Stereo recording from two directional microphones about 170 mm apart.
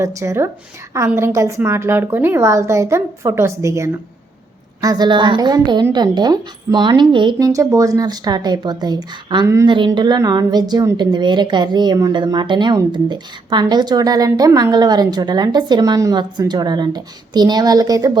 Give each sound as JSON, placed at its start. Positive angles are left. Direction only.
{"t": 0.0, "sound": "a woman's voice", "side_deg": -15}